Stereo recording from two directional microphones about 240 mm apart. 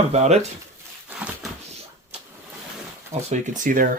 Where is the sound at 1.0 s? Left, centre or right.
Centre.